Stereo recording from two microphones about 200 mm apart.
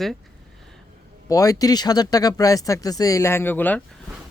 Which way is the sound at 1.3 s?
15° left (ahead or behind).